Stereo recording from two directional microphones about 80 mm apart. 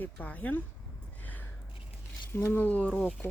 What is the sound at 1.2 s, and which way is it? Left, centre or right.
Gasp, left.